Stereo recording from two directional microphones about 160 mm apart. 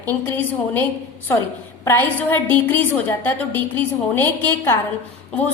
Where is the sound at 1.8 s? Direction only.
15° left (ahead or behind).